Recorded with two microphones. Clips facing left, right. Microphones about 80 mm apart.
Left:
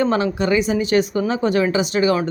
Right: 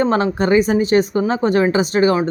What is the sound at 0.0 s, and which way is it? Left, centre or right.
Speech, right.